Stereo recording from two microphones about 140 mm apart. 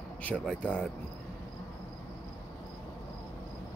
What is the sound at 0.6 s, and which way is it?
Speech, 10° left (ahead or behind).